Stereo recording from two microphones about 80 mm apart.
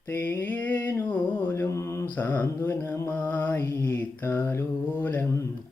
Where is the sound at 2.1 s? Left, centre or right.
Left.